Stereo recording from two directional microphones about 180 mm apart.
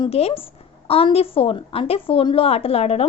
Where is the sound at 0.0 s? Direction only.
35° left (ahead or behind).